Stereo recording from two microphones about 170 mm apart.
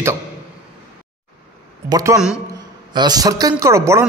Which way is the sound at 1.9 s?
20° right (ahead or behind).